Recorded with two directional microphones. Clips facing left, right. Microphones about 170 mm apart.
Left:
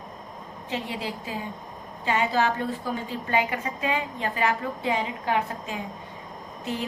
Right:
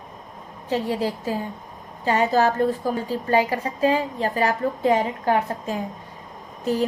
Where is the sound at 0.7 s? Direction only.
40° right (ahead or behind).